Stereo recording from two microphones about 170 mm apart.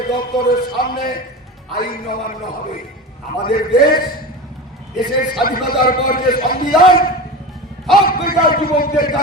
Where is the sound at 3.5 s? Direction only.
60° left (ahead or behind).